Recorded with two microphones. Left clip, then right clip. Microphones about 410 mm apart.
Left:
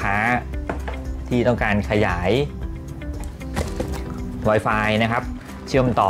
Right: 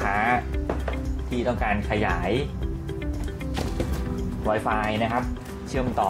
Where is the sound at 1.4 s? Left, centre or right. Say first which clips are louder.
Left 5 dB; left.